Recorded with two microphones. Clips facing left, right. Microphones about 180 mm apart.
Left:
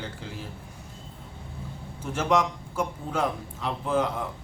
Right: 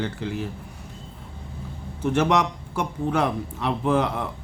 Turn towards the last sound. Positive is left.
turn(degrees=-65)  # may be behind; listen again after turning